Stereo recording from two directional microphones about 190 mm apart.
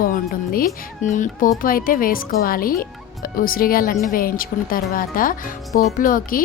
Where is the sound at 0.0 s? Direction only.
50° left (ahead or behind).